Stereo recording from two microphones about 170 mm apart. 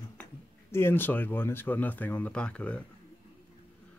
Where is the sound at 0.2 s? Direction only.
15° left (ahead or behind).